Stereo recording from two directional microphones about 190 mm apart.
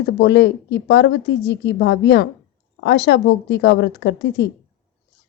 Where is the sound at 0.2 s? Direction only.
70° left (ahead or behind).